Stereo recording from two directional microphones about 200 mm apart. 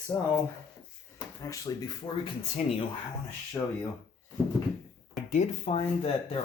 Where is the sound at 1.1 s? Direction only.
15° left (ahead or behind).